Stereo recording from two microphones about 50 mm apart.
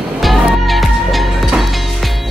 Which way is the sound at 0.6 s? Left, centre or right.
Centre.